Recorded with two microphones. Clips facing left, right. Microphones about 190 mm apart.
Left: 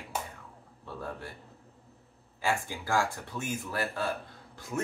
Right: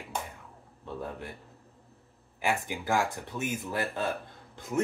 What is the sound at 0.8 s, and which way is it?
Speech, 20° right (ahead or behind).